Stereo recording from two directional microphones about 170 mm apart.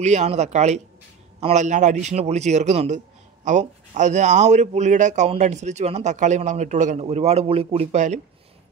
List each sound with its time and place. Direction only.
0.0 s speech: 40° right (ahead or behind)